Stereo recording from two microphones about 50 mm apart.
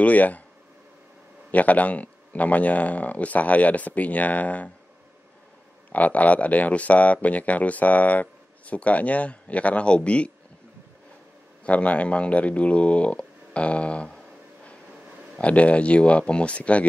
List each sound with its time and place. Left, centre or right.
0.0 s speech: left
1.5 s speech: left
5.9 s speech: left
11.6 s speech: left
15.3 s speech: left